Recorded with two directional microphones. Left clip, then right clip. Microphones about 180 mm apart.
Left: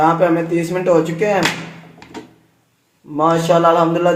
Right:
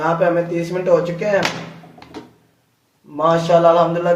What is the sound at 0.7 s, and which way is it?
Speech, 60° left (ahead or behind).